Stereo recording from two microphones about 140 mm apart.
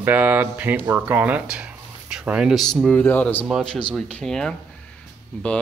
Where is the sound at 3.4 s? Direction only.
Centre (ahead or behind).